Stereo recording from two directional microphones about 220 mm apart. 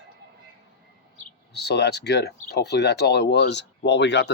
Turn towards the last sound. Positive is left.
turn(degrees=50)  # may be behind; listen again after turning